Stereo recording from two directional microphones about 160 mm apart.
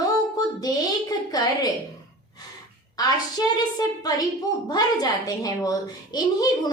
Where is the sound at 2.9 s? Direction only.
25° left (ahead or behind).